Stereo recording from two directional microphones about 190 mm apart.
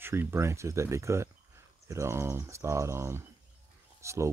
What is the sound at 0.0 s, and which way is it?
Speech, 10° right (ahead or behind).